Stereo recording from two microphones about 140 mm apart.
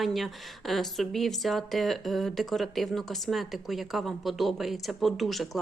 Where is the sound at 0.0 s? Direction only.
Centre (ahead or behind).